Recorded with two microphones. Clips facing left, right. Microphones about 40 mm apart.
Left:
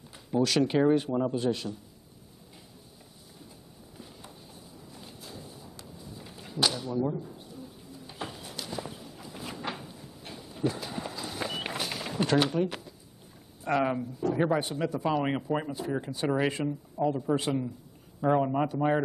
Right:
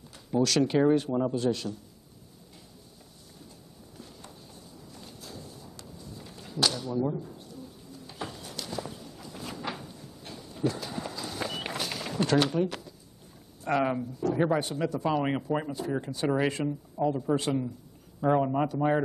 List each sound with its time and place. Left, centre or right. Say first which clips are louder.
0.3 s a man's voice: right 1 dB; centre
4.9 s a sound: right 1 dB; centre
7.2 s pigeon: even; centre
12.6 s speech: even; centre
13.7 s a man's voice: even; centre
15.0 s a man's voice: even; centre